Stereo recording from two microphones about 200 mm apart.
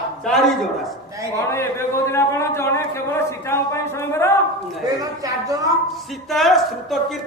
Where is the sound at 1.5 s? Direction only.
15° left (ahead or behind).